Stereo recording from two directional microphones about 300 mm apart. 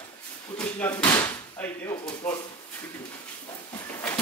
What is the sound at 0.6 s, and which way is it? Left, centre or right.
Speech, centre.